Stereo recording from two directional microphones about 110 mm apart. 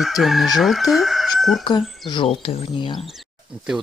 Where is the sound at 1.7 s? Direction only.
45° left (ahead or behind); by 2.7 s 65° left (ahead or behind).